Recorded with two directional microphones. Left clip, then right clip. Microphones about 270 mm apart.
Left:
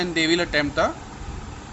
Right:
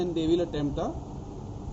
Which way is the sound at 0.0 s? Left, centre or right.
Left.